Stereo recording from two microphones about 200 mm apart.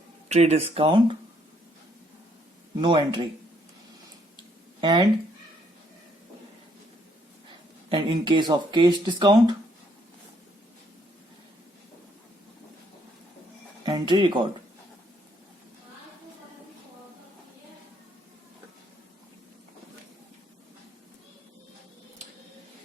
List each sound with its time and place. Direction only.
0.3 s speech: 35° right (ahead or behind)
2.8 s speech: 25° right (ahead or behind)
4.8 s speech: 20° right (ahead or behind)
7.9 s speech: 25° right (ahead or behind)
13.8 s speech: 20° right (ahead or behind)